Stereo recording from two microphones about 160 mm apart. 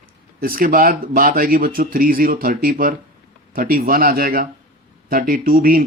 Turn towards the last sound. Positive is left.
turn(degrees=-60)  # may be behind; listen again after turning